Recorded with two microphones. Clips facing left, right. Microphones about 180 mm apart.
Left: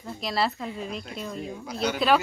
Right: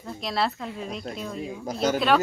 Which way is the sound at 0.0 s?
Centre (ahead or behind).